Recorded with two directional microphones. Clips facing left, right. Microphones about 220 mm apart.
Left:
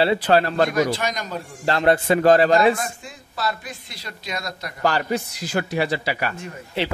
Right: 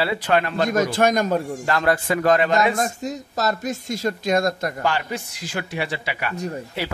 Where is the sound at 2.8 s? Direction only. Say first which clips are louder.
Right 7 dB; 40° right (ahead or behind).